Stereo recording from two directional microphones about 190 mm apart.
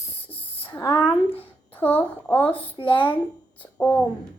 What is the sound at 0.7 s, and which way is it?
Speech, 25° left (ahead or behind).